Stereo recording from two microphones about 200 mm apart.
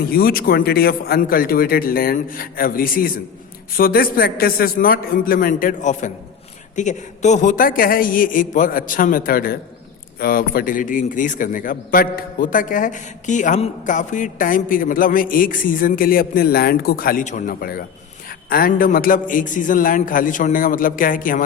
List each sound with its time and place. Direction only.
0.1 s a man's voice: 50° left (ahead or behind)